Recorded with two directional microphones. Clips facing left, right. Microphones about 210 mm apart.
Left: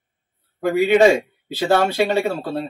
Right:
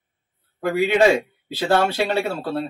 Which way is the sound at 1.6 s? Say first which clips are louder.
Left 2 dB; 15° left (ahead or behind).